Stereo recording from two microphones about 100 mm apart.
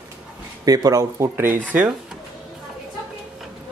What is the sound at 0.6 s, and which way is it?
Speech, 40° right (ahead or behind).